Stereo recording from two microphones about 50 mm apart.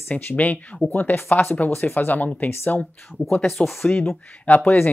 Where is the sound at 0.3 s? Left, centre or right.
Left.